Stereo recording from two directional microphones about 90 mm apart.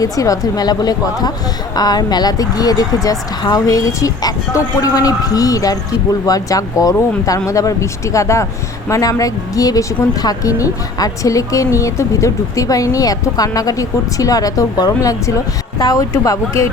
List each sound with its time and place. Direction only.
0.0 s a woman's voice: 40° left (ahead or behind)